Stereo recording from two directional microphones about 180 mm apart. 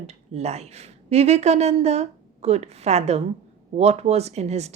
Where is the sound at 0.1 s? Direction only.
35° right (ahead or behind).